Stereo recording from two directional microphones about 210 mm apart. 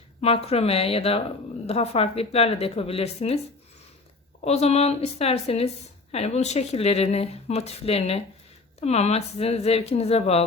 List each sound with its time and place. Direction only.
0.2 s a woman's voice: 30° left (ahead or behind)